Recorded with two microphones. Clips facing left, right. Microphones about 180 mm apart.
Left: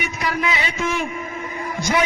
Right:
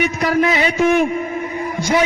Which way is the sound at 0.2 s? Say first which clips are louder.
Right 6 dB; 40° right (ahead or behind).